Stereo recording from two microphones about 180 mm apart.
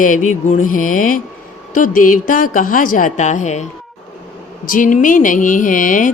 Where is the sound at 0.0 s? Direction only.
45° left (ahead or behind).